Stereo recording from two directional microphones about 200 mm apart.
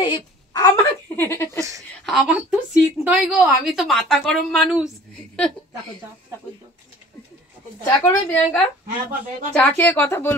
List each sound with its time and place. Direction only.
0.0 s a sound: 20° left (ahead or behind)
1.6 s a woman's voice: 15° right (ahead or behind)
2.0 s a woman's voice: centre (ahead or behind)
7.8 s a woman's voice: 10° left (ahead or behind)